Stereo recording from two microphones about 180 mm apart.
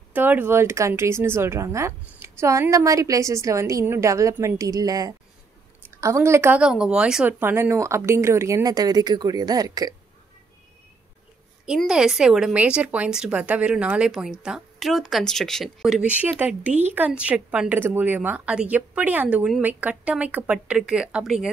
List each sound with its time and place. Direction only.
0.1 s speech: 10° right (ahead or behind)
11.6 s a woman's voice: 5° right (ahead or behind)